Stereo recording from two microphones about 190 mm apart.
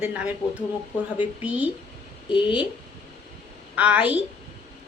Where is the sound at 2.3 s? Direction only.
25° left (ahead or behind).